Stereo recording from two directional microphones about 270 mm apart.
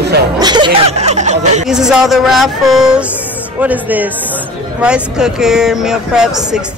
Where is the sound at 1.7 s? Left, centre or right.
Centre.